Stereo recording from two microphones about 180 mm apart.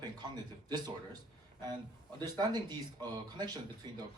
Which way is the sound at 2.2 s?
20° right (ahead or behind).